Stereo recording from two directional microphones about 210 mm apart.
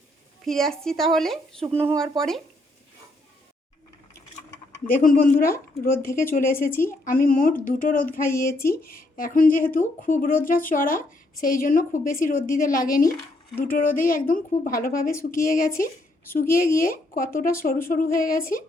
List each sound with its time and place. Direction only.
0.4 s a woman's voice: centre (ahead or behind)
1.7 s speech: 10° right (ahead or behind)
2.0 s a woman's voice: centre (ahead or behind)
4.9 s speech: 40° left (ahead or behind)
6.7 s a woman's voice: 10° left (ahead or behind)
7.0 s speech: 40° left (ahead or behind)